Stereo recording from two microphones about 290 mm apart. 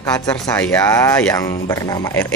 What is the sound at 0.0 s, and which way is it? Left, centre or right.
Speech, centre.